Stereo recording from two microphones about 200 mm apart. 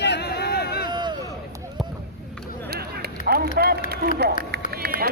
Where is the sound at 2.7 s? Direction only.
50° right (ahead or behind).